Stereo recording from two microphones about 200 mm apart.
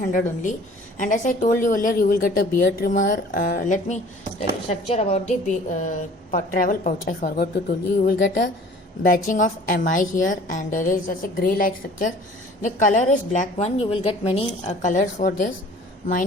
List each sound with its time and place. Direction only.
0.1 s a woman's voice: 45° left (ahead or behind)
8.0 s a woman's voice: 55° left (ahead or behind)
9.0 s a woman's voice: 40° left (ahead or behind)